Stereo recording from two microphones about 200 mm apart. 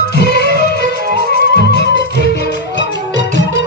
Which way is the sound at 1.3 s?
50° right (ahead or behind).